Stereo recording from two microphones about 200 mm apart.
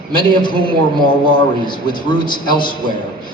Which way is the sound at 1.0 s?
25° left (ahead or behind).